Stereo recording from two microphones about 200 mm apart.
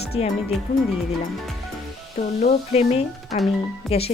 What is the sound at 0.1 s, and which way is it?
Speech, 30° left (ahead or behind).